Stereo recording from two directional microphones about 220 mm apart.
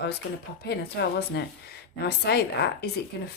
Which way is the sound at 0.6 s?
45° left (ahead or behind).